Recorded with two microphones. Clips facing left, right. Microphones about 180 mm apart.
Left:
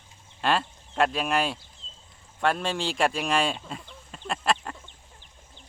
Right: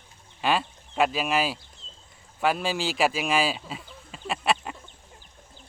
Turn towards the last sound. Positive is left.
turn(degrees=-5)  # may be behind; listen again after turning